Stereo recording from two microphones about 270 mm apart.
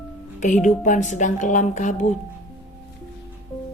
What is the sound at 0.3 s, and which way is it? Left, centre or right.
A woman's voice, left.